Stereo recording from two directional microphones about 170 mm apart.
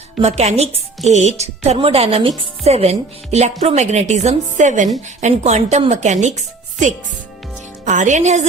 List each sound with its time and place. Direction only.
0.2 s speech: 40° right (ahead or behind)